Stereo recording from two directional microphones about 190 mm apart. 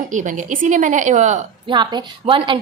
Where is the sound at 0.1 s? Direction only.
40° right (ahead or behind).